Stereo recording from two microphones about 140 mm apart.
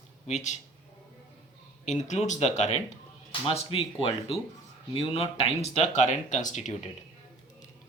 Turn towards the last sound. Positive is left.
turn(degrees=60)  # may be behind; listen again after turning